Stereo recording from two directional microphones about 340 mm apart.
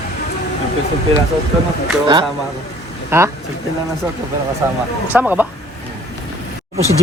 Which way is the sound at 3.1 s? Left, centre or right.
Centre.